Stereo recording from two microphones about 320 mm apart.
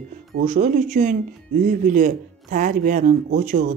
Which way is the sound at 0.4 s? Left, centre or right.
Right.